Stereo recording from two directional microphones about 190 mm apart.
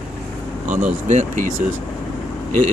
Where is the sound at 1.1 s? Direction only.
40° right (ahead or behind).